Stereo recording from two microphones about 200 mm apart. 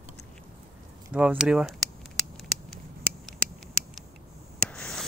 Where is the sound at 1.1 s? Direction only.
5° right (ahead or behind).